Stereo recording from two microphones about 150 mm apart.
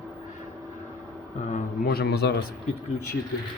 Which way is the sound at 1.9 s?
90° left.